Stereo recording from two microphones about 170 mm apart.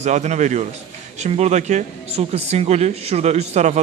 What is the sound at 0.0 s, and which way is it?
A man's voice, 45° right (ahead or behind).